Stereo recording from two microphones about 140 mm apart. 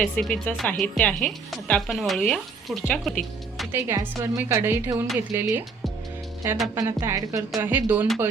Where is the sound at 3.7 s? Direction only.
15° right (ahead or behind).